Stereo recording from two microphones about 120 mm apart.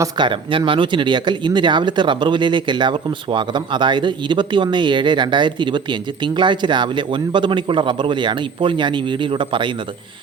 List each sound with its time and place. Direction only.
0.2 s speech: 45° right (ahead or behind)